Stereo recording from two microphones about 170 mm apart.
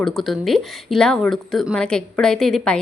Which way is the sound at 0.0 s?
Centre (ahead or behind).